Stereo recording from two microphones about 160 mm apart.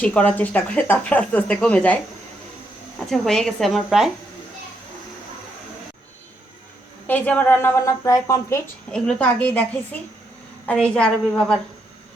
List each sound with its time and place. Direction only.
0.0 s speech: 10° left (ahead or behind)
3.1 s a woman's voice: 5° left (ahead or behind)
7.1 s speech: 10° left (ahead or behind)
8.9 s speech: 5° left (ahead or behind)